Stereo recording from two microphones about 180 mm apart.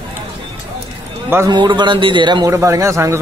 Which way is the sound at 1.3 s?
20° right (ahead or behind).